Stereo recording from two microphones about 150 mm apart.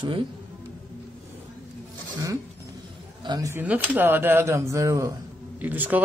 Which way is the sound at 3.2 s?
25° right (ahead or behind).